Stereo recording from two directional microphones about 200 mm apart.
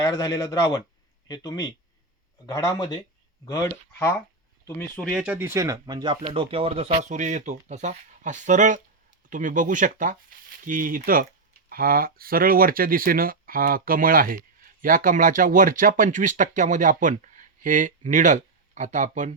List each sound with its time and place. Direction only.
0.0 s a man's voice: 20° left (ahead or behind)
4.9 s speech: 5° left (ahead or behind)
5.2 s speech: 10° right (ahead or behind); by 19.3 s 40° right (ahead or behind)